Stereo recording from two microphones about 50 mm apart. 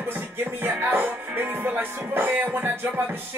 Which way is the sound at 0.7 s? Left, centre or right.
Right.